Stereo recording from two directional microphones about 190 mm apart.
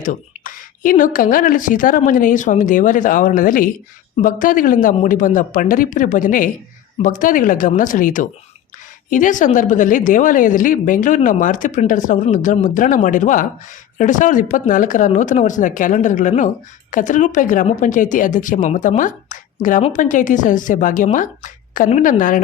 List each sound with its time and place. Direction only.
0.0 s a woman's voice: 45° left (ahead or behind)